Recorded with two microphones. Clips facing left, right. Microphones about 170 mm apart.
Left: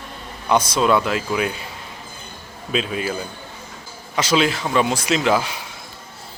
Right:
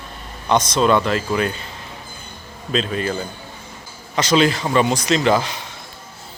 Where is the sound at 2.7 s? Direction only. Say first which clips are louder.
Right 2 dB; 5° left (ahead or behind).